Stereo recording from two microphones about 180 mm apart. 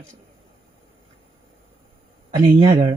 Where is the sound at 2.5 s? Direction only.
30° right (ahead or behind).